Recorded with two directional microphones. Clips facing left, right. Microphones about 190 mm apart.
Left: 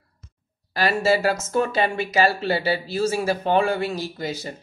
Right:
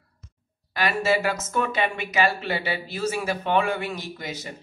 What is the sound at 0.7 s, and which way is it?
Speech, 35° left (ahead or behind).